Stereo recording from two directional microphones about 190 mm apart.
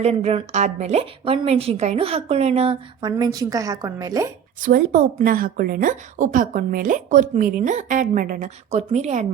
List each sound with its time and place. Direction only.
0.0 s a woman's voice: 35° right (ahead or behind)
3.1 s a woman's voice: 20° right (ahead or behind)
4.6 s a woman's voice: 45° right (ahead or behind)